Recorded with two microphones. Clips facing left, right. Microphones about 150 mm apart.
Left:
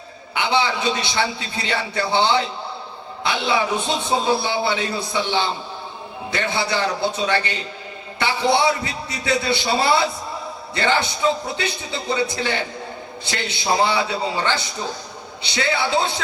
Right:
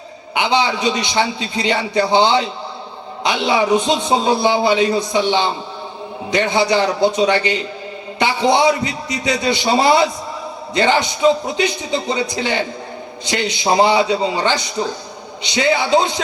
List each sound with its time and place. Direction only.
0.3 s a man's voice: 15° right (ahead or behind)